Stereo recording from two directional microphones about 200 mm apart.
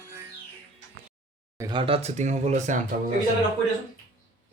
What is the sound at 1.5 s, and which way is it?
Speech, 20° right (ahead or behind).